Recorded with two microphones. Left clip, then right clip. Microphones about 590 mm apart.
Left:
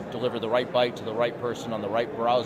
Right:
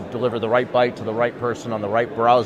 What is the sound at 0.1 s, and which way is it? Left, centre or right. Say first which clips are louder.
A man's voice: right 6 dB; right.